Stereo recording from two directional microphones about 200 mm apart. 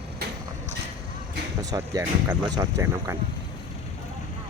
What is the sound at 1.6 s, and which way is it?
Speech, 15° right (ahead or behind).